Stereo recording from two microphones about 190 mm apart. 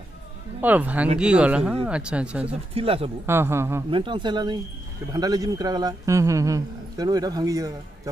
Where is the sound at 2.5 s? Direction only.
30° right (ahead or behind).